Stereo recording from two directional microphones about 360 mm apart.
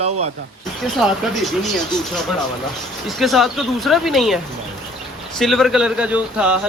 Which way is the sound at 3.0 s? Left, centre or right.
Centre.